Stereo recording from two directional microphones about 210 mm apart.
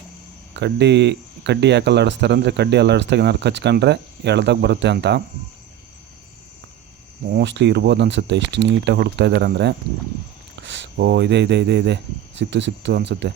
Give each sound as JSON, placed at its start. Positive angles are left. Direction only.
{"t": 0.5, "sound": "speech", "side_deg": -55}
{"t": 7.3, "sound": "speech", "side_deg": -55}